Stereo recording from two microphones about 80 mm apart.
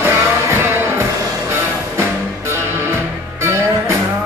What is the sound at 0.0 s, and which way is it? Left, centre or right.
Music, right.